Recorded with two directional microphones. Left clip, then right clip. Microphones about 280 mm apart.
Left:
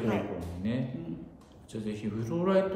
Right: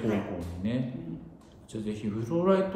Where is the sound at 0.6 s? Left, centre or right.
Centre.